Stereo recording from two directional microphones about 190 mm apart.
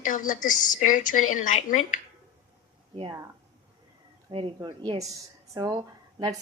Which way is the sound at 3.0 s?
25° right (ahead or behind).